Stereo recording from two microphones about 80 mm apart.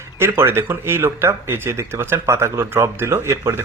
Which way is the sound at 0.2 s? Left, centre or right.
Right.